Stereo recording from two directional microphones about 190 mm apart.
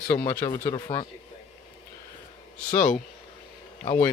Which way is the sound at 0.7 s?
30° left (ahead or behind).